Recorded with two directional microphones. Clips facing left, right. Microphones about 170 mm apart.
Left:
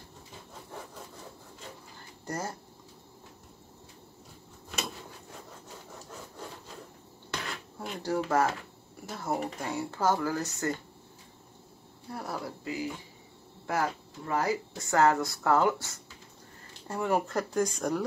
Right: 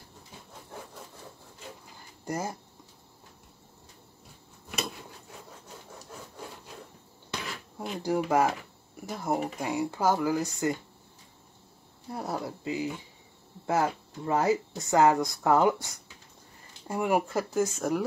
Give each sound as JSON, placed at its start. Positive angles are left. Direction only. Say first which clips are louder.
{"t": 2.2, "sound": "speech", "louder": "right 3 dB", "side_deg": -10}
{"t": 8.0, "sound": "speech", "louder": "right 2 dB", "side_deg": -15}
{"t": 12.1, "sound": "speech", "louder": "right 3 dB", "side_deg": -20}